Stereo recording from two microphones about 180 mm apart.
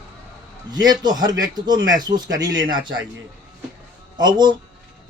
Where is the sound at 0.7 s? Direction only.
25° right (ahead or behind).